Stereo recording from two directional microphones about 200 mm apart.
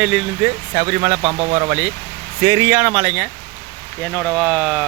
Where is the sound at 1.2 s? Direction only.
30° right (ahead or behind).